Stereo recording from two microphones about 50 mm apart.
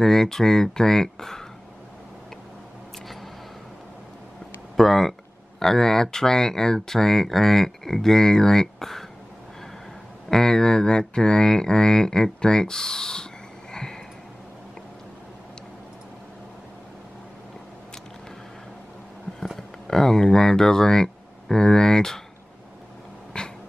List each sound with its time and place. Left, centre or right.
0.0 s speech: centre
4.7 s speech: centre
10.3 s speech: centre
19.9 s speech: centre
23.3 s cat: centre